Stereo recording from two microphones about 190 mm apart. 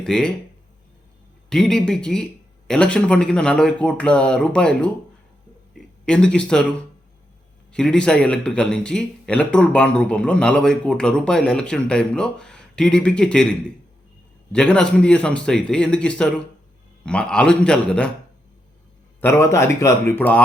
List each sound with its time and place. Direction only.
0.0 s a man's voice: 5° left (ahead or behind)
1.5 s a man's voice: 5° left (ahead or behind)
19.2 s speech: 15° left (ahead or behind)